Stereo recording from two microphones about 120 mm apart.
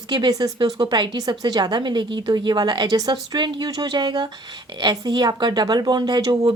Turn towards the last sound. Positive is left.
turn(degrees=-35)  # may be behind; listen again after turning